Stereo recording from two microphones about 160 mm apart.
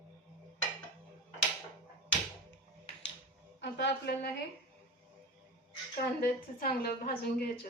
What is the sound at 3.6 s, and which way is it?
Speech, 90° left.